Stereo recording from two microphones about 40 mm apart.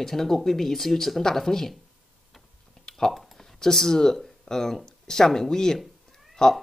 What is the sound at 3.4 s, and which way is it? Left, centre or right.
Speech, centre.